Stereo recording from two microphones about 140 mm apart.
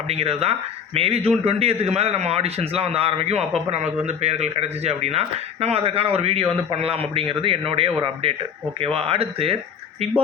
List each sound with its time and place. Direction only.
0.1 s a man's voice: 45° right (ahead or behind)